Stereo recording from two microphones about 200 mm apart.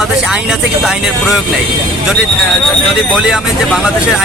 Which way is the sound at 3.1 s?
5° right (ahead or behind).